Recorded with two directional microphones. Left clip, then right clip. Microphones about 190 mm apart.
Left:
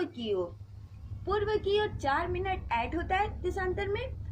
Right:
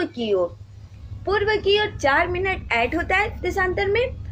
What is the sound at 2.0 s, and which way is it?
A woman's voice, 15° right (ahead or behind).